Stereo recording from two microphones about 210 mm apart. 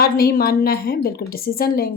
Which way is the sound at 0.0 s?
45° left (ahead or behind).